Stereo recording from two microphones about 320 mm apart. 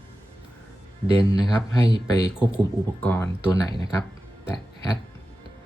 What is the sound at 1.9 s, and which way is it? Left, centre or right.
Speech, centre.